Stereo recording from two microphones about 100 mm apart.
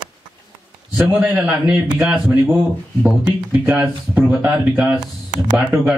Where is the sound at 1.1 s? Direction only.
5° right (ahead or behind).